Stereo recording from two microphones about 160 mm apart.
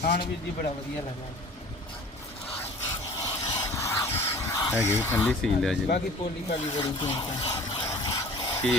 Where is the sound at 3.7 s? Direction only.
20° left (ahead or behind).